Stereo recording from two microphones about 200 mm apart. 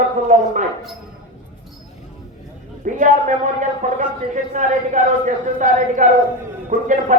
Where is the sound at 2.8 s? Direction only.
40° right (ahead or behind).